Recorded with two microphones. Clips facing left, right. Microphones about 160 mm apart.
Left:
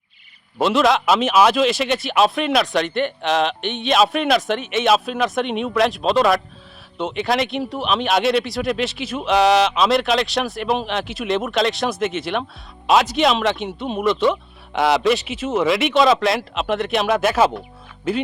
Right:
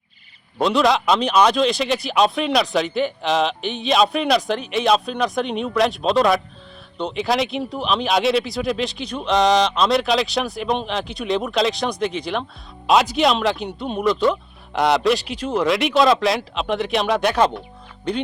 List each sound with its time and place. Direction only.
0.6 s speech: centre (ahead or behind)